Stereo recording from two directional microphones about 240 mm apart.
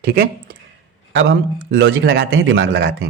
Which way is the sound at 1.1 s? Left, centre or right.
Right.